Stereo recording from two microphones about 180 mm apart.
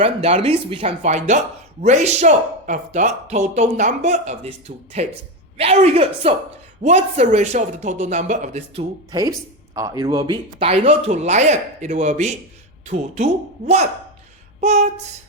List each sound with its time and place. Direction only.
0.0 s speech: 35° right (ahead or behind)
8.8 s speech: 20° right (ahead or behind); by 13.8 s 35° right (ahead or behind)
14.6 s a sound: 40° right (ahead or behind)